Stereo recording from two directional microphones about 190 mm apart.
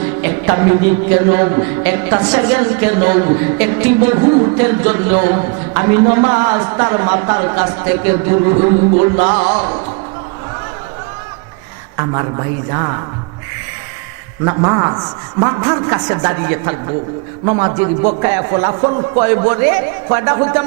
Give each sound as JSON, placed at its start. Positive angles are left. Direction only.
{"t": 0.2, "sound": "a man's voice", "side_deg": -20}
{"t": 4.2, "sound": "a man's voice", "side_deg": -25}
{"t": 8.3, "sound": "a man's voice", "side_deg": -25}
{"t": 9.4, "sound": "music", "side_deg": -30}
{"t": 14.4, "sound": "a man's voice", "side_deg": -25}